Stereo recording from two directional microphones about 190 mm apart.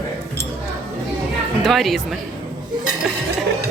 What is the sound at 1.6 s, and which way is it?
Speech, centre (ahead or behind).